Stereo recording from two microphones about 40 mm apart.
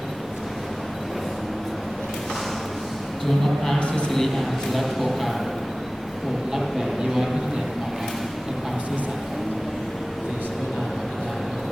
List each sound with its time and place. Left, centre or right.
3.2 s a man's voice: centre
3.8 s a man's voice: left
4.1 s a man's voice: centre
6.5 s speech: centre